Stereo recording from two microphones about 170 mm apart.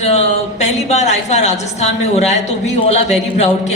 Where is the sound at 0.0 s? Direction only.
40° left (ahead or behind).